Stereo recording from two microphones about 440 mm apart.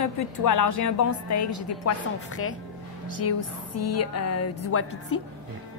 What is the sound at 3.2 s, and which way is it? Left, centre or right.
A woman's voice, left.